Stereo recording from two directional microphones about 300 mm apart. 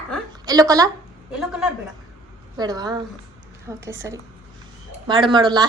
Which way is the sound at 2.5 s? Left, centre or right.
Centre.